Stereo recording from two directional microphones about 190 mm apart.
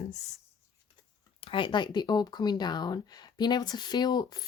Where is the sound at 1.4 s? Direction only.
25° left (ahead or behind).